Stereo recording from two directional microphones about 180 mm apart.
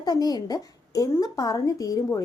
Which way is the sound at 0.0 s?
20° left (ahead or behind).